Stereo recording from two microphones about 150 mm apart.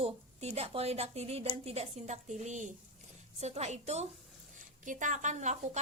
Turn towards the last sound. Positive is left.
turn(degrees=-50)  # may be behind; listen again after turning